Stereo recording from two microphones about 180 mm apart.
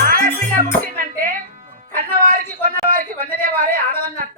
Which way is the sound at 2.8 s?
50° right (ahead or behind).